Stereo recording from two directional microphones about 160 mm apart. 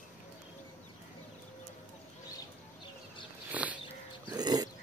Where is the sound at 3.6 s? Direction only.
5° right (ahead or behind).